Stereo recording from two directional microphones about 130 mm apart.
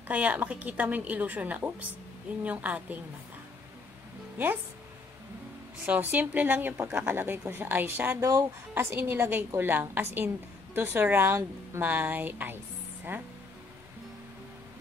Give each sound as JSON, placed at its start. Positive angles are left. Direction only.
{"t": 0.1, "sound": "a woman's voice", "side_deg": -10}
{"t": 5.9, "sound": "a woman's voice", "side_deg": -10}